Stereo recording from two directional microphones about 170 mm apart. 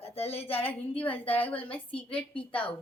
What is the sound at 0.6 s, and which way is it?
A woman's voice, 10° left (ahead or behind).